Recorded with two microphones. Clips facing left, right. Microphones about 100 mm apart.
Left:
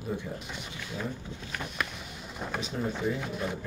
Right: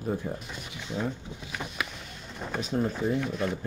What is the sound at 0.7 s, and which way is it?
Speech, 20° right (ahead or behind).